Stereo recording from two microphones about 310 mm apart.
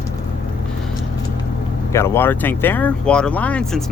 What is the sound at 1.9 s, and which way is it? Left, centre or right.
Speech, centre.